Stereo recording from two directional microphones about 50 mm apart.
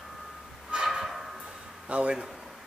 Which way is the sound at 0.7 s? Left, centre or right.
Centre.